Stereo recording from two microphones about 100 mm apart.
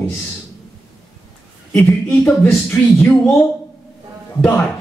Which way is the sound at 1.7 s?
5° left (ahead or behind).